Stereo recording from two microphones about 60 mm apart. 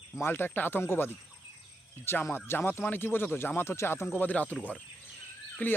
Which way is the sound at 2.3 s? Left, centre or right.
Left.